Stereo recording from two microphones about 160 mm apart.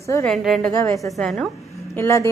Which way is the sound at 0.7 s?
20° left (ahead or behind).